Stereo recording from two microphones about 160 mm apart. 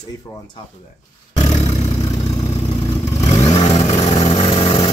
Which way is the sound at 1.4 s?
40° left (ahead or behind).